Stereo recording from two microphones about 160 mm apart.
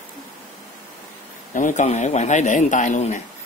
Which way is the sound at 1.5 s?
50° left (ahead or behind).